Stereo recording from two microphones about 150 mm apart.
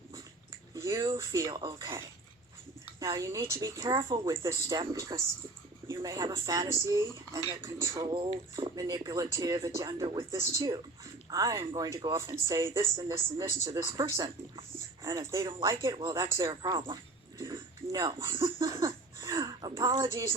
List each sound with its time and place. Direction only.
0.7 s a sound: 20° right (ahead or behind)
0.9 s speech: 30° right (ahead or behind)
1.2 s speech: 20° right (ahead or behind)
3.1 s speech: 20° right (ahead or behind)
8.0 s speech: 35° right (ahead or behind)
15.4 s speech: 30° right (ahead or behind)
15.7 s speech: 20° right (ahead or behind)
17.5 s a sound: 25° right (ahead or behind)